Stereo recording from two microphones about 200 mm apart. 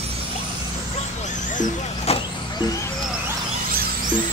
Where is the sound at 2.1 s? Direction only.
30° left (ahead or behind).